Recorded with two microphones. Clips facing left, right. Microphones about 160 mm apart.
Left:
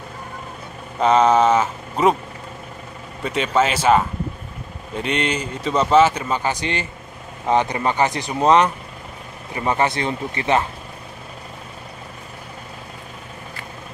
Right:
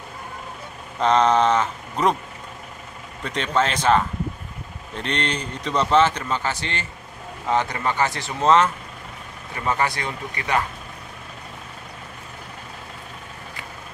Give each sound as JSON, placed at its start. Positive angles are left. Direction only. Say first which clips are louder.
{"t": 1.0, "sound": "a man's voice", "louder": "left 3 dB", "side_deg": 5}
{"t": 3.3, "sound": "a man's voice", "louder": "left 3 dB", "side_deg": 5}